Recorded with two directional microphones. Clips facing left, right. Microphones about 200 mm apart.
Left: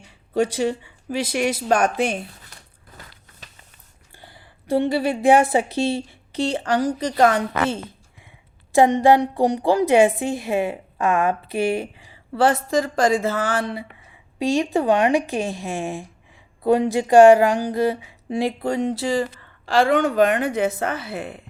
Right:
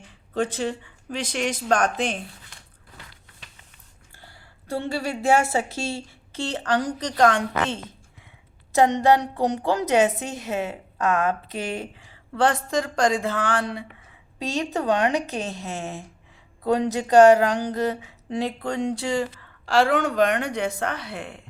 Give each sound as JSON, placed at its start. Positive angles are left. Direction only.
{"t": 0.3, "sound": "a woman's voice", "side_deg": 10}
{"t": 2.9, "sound": "a sound", "side_deg": 45}
{"t": 3.4, "sound": "music", "side_deg": 40}
{"t": 4.2, "sound": "a woman's voice", "side_deg": 15}
{"t": 14.3, "sound": "a woman's voice", "side_deg": 15}